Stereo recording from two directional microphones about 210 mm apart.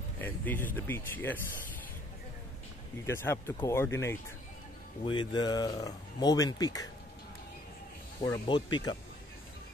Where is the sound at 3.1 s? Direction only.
10° left (ahead or behind).